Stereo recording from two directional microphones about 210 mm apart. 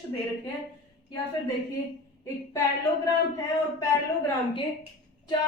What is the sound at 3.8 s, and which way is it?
Speech, 15° left (ahead or behind).